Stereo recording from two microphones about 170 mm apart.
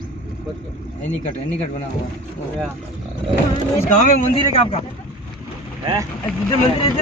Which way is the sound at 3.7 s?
45° left (ahead or behind).